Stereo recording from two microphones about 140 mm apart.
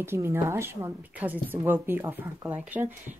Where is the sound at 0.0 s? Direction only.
15° right (ahead or behind).